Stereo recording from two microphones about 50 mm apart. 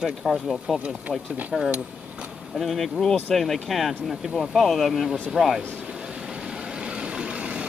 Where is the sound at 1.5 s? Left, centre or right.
Centre.